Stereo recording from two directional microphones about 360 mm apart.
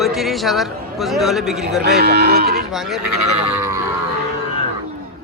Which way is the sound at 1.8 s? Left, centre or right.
Right.